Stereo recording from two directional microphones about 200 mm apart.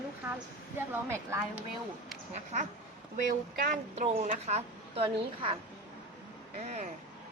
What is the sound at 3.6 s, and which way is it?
A woman's voice, 40° right (ahead or behind).